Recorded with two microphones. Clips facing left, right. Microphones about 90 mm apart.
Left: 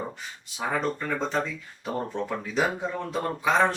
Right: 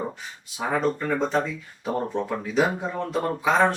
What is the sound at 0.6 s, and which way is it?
Speech, 5° right (ahead or behind).